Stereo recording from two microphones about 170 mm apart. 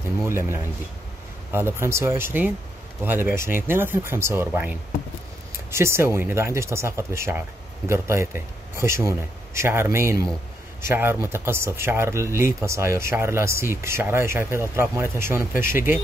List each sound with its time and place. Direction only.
0.2 s speech: 15° right (ahead or behind)